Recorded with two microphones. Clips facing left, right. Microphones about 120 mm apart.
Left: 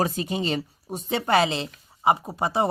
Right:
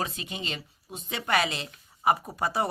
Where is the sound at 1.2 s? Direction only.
30° left (ahead or behind).